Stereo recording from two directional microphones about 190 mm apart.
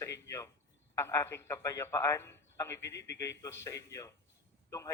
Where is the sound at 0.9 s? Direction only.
15° left (ahead or behind).